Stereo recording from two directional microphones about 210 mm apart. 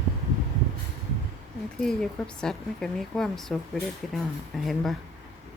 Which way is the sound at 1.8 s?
5° left (ahead or behind).